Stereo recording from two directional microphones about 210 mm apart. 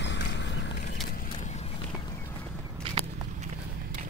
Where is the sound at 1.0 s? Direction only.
40° left (ahead or behind).